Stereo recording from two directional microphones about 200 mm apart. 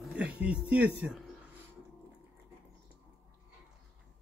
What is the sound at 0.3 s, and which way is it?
Speech, 5° right (ahead or behind).